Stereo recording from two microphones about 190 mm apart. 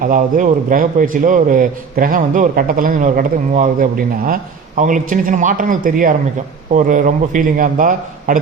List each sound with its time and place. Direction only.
0.0 s a man's voice: 45° right (ahead or behind)